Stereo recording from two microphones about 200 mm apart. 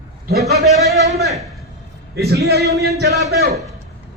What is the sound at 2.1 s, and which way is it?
Speech, 50° right (ahead or behind).